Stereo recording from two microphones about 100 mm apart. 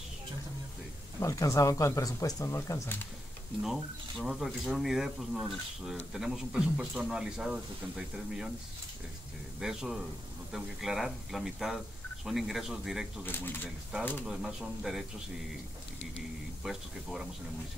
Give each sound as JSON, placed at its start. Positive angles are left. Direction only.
{"t": 1.2, "sound": "speech", "side_deg": 30}
{"t": 3.6, "sound": "a man's voice", "side_deg": 0}
{"t": 9.6, "sound": "speech", "side_deg": -5}
{"t": 13.2, "sound": "speech", "side_deg": 20}
{"t": 14.2, "sound": "speech", "side_deg": -5}
{"t": 16.6, "sound": "speech", "side_deg": -5}